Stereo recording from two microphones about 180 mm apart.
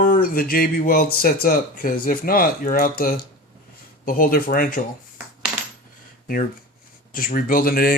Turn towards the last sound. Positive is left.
turn(degrees=55)  # may be behind; listen again after turning